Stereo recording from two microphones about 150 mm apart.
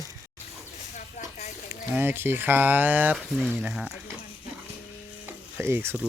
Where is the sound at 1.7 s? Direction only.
15° right (ahead or behind).